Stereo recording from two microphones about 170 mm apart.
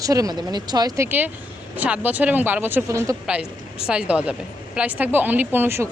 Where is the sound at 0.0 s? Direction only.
20° right (ahead or behind).